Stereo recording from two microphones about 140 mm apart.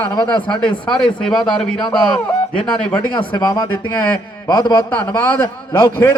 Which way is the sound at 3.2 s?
30° left (ahead or behind).